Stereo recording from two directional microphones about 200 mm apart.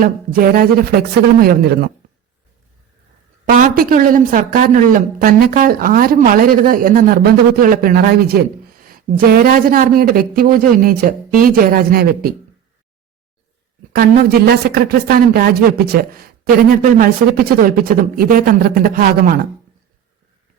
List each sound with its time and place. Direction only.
0.0 s a woman's voice: 45° right (ahead or behind)
3.5 s a woman's voice: 45° right (ahead or behind)
13.9 s a woman's voice: 50° right (ahead or behind)